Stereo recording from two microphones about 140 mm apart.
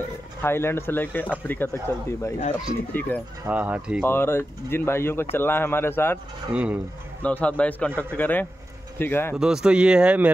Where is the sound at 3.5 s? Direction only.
10° right (ahead or behind).